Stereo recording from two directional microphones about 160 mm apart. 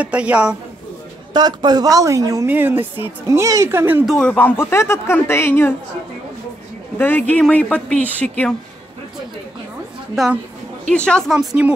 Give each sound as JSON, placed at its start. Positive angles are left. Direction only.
{"t": 0.0, "sound": "speech", "side_deg": -10}
{"t": 1.3, "sound": "a woman's voice", "side_deg": -25}
{"t": 4.1, "sound": "speech", "side_deg": 5}
{"t": 7.0, "sound": "speech", "side_deg": 10}
{"t": 10.1, "sound": "speech", "side_deg": 0}